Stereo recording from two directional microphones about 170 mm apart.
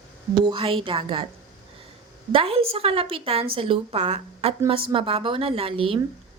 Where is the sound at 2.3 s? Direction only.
35° right (ahead or behind).